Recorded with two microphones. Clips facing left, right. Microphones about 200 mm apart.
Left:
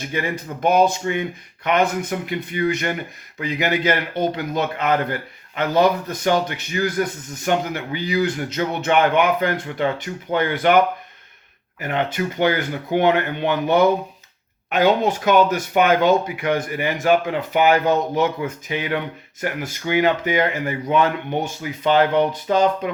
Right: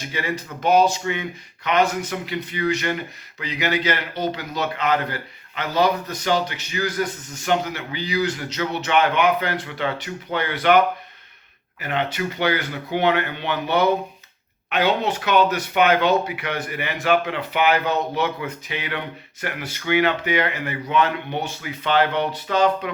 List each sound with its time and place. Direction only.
0.1 s speech: 50° left (ahead or behind)
11.8 s speech: 45° left (ahead or behind)